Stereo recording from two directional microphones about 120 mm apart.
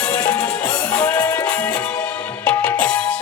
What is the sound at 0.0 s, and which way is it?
Music, 25° left (ahead or behind).